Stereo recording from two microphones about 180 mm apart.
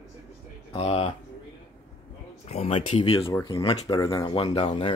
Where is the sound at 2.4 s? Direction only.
35° left (ahead or behind).